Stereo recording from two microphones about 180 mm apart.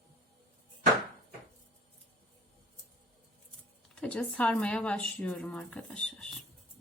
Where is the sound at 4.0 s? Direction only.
5° left (ahead or behind).